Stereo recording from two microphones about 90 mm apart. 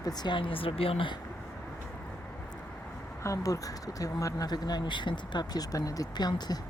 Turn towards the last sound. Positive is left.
turn(degrees=50)  # may be behind; listen again after turning